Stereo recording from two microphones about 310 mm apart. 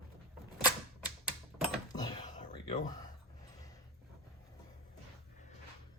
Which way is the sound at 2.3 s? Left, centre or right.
Left.